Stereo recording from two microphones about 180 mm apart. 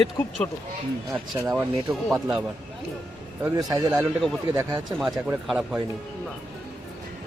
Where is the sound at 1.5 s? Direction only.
Centre (ahead or behind).